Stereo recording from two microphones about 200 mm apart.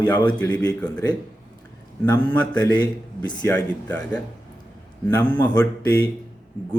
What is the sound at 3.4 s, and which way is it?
Mantra, 5° left (ahead or behind).